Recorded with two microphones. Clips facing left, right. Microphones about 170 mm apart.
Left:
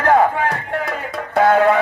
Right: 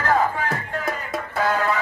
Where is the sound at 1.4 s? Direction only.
60° left (ahead or behind).